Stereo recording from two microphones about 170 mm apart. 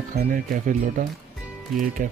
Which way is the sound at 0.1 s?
55° right (ahead or behind).